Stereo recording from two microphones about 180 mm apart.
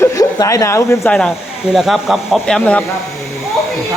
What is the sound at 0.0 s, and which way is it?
Speech, 15° left (ahead or behind).